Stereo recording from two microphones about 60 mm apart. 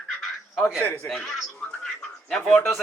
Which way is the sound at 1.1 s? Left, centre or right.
Centre.